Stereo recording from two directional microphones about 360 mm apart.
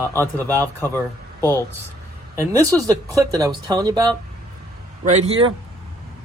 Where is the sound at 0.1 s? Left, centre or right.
Centre.